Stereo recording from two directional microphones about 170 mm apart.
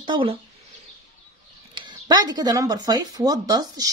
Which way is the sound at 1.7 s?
25° right (ahead or behind).